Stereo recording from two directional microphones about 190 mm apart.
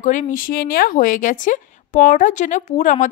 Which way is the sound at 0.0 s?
40° left (ahead or behind).